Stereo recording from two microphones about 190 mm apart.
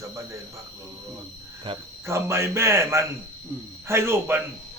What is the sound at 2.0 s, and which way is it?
Speech, 15° right (ahead or behind).